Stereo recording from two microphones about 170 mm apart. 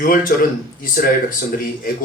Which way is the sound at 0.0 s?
55° left (ahead or behind).